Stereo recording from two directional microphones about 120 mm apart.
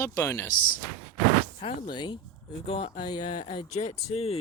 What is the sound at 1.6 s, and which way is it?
Speech, 40° left (ahead or behind).